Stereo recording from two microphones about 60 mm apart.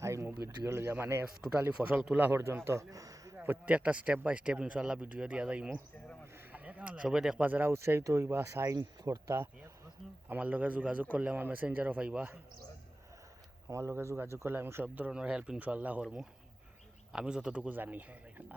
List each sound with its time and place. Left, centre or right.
0.0 s a sound: right
0.4 s speech: right
2.9 s a sound: right
3.3 s a sound: right
3.7 s speech: right
6.5 s a sound: right
7.1 s speech: centre
7.3 s speech: right
7.7 s speech: right
8.8 s speech: right
10.2 s speech: right
13.7 s speech: right
15.1 s speech: centre
17.1 s speech: centre; by 18.4 s right